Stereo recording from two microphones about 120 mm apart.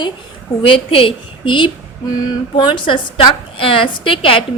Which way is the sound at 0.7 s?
50° left (ahead or behind).